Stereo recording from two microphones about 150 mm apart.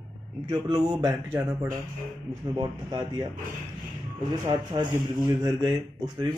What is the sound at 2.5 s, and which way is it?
Speech, 30° right (ahead or behind).